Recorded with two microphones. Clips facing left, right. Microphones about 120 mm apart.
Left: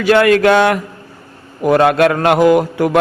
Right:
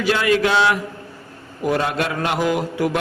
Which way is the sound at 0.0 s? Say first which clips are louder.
Left 8 dB; 60° left (ahead or behind).